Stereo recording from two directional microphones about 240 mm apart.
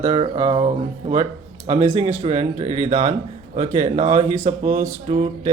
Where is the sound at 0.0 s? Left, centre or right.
Right.